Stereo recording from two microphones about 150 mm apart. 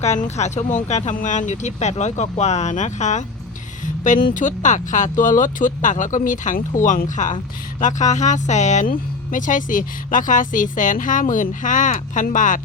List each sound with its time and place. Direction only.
0.0 s speech: 50° left (ahead or behind)